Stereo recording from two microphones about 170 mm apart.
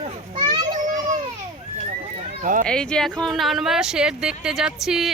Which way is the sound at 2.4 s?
50° right (ahead or behind).